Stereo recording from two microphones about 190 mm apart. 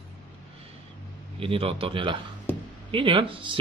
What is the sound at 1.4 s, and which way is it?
A man's voice, 30° right (ahead or behind).